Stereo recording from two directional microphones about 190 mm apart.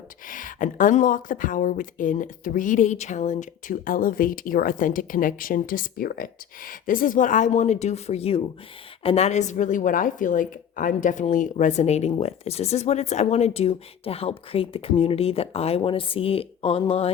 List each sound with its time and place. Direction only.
0.3 s a woman's voice: 45° left (ahead or behind)